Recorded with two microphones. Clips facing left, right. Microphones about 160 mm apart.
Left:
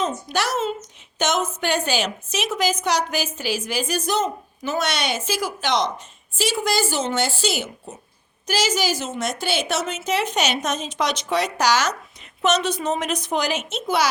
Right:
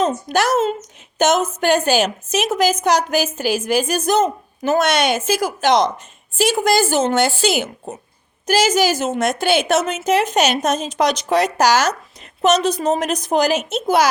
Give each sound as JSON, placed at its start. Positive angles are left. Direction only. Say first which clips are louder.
{"t": 0.0, "sound": "a woman's voice", "louder": "right 6 dB", "side_deg": -50}